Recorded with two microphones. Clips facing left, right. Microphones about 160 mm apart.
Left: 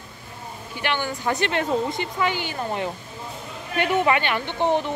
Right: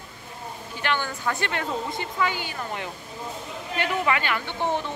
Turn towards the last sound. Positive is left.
turn(degrees=25)  # may be behind; listen again after turning